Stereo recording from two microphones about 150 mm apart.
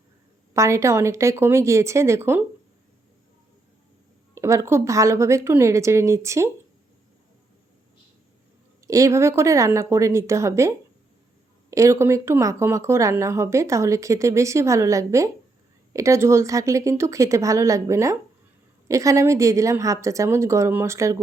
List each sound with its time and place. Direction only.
0.5 s speech: 20° right (ahead or behind)
4.4 s speech: 20° right (ahead or behind)
8.9 s speech: 20° right (ahead or behind)